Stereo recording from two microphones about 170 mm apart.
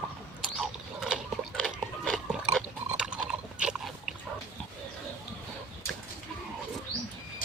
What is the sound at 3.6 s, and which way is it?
Dog, 5° right (ahead or behind).